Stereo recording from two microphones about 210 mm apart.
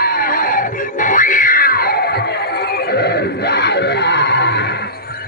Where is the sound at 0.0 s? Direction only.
45° left (ahead or behind).